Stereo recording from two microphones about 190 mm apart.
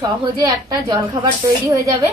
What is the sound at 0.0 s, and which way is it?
Speech, 20° right (ahead or behind).